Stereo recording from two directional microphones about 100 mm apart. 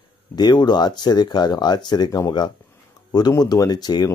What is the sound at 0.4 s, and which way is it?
Speech, 45° left (ahead or behind).